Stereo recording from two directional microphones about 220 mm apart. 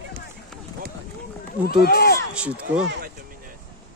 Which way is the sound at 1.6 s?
45° left (ahead or behind).